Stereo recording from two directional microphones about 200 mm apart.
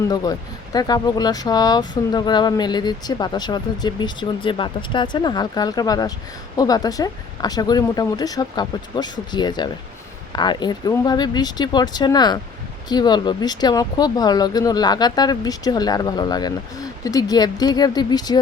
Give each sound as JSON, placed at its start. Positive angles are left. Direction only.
{"t": 0.1, "sound": "speech", "side_deg": 20}